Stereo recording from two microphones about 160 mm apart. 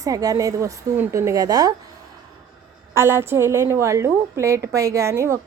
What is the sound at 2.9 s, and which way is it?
A woman's voice, 15° right (ahead or behind).